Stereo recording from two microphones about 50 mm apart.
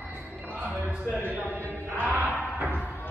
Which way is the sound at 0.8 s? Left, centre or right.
Right.